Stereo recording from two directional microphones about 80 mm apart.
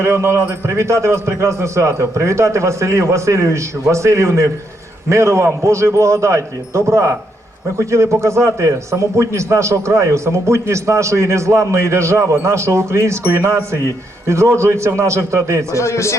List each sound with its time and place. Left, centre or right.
0.0 s a man's voice: right
15.7 s speech: left